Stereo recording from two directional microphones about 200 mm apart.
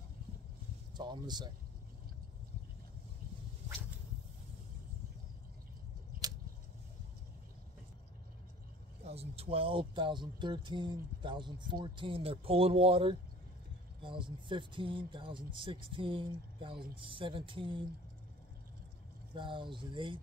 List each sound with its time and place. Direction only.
0.9 s speech: 20° right (ahead or behind)
9.0 s speech: 30° right (ahead or behind)
19.3 s speech: 25° right (ahead or behind)